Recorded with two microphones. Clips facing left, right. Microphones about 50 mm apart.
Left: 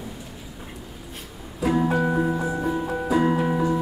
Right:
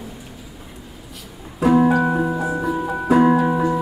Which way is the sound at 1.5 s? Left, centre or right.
Right.